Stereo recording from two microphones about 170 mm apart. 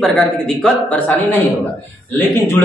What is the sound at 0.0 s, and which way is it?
Speech, 5° left (ahead or behind).